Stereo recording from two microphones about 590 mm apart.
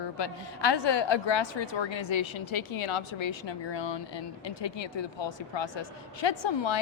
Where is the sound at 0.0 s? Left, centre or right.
Left.